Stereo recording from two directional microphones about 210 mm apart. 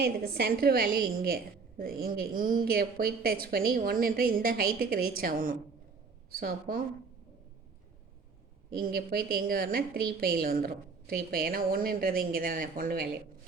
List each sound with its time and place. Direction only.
0.0 s a woman's voice: 50° right (ahead or behind)
8.8 s a woman's voice: 45° right (ahead or behind)